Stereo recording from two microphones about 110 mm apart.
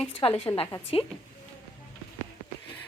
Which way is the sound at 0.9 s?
55° left (ahead or behind).